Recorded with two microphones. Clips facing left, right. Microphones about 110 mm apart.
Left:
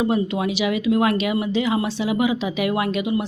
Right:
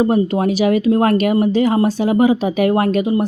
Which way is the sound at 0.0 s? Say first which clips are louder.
Right 6 dB; 40° right (ahead or behind).